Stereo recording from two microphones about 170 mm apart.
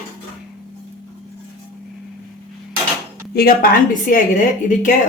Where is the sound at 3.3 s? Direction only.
60° left (ahead or behind).